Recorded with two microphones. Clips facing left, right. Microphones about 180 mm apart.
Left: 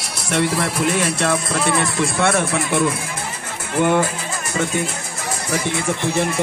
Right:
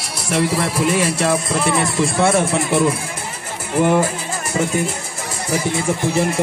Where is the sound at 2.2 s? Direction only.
30° right (ahead or behind).